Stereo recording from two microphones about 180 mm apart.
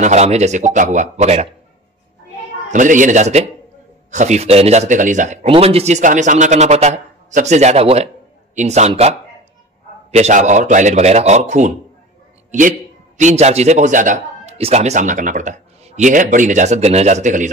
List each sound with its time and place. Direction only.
0.0 s speech: 40° right (ahead or behind)
2.7 s a man's voice: 45° right (ahead or behind)
10.1 s speech: 40° right (ahead or behind)
12.4 s a sound: 45° right (ahead or behind)
13.2 s speech: 40° right (ahead or behind)